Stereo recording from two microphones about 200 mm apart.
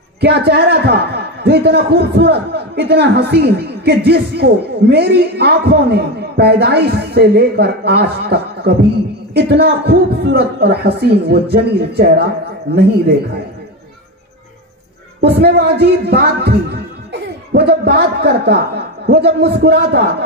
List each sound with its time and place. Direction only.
0.2 s a man's voice: 55° right (ahead or behind)
15.1 s a man's voice: 55° right (ahead or behind)